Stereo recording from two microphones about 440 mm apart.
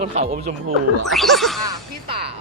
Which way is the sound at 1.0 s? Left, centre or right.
Centre.